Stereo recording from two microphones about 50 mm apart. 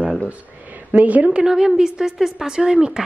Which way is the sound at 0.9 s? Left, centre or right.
Right.